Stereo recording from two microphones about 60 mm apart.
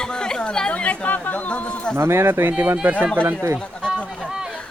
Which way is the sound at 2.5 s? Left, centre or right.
Right.